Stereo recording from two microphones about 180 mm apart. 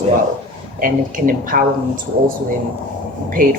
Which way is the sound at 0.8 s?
50° right (ahead or behind).